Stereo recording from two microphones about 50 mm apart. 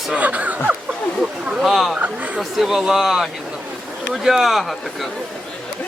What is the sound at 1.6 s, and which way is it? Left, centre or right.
Speech, centre.